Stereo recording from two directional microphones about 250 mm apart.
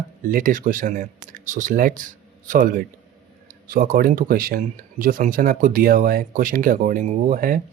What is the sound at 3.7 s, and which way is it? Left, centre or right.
Speech, right.